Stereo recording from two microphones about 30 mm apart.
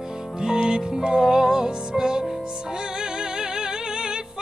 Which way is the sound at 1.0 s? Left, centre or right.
Right.